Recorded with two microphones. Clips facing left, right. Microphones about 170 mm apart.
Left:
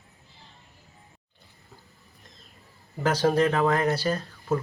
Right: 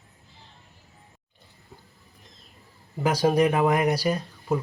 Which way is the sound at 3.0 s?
10° right (ahead or behind).